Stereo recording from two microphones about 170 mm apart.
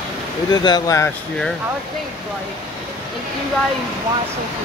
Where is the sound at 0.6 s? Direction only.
20° left (ahead or behind).